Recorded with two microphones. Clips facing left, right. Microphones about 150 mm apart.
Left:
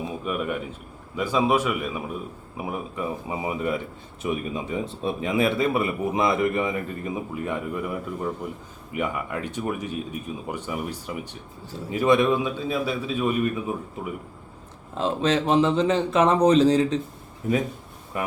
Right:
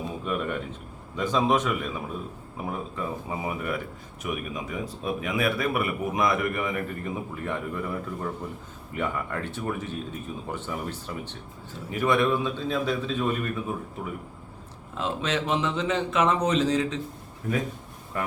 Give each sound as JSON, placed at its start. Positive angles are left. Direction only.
{"t": 0.3, "sound": "a man's voice", "side_deg": 5}
{"t": 14.9, "sound": "speech", "side_deg": 35}
{"t": 17.4, "sound": "a man's voice", "side_deg": 20}